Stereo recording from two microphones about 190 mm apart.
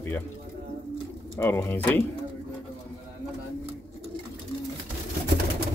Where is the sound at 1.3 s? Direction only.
10° left (ahead or behind).